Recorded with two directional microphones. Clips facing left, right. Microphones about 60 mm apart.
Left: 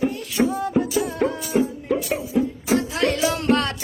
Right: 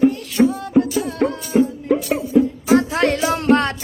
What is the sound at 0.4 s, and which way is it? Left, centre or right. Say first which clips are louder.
Music: right 5 dB; centre.